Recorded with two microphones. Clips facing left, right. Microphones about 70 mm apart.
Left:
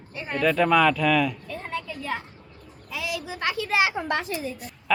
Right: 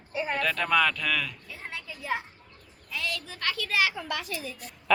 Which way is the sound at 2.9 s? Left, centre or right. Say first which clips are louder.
Left 3 dB; centre.